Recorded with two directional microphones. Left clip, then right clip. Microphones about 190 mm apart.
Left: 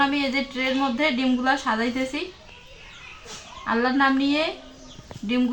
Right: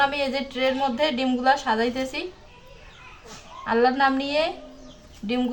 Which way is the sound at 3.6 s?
40° right (ahead or behind).